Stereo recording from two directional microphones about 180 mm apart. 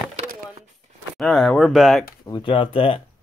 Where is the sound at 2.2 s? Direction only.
25° left (ahead or behind).